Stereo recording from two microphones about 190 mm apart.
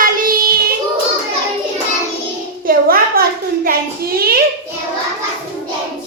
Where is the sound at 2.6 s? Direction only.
50° right (ahead or behind).